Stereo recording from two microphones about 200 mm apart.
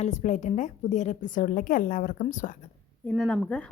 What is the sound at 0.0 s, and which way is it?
A woman's voice, 35° left (ahead or behind).